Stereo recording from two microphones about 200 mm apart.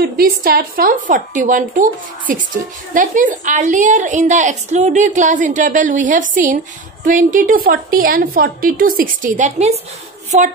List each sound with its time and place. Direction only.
0.0 s a woman's voice: 50° right (ahead or behind)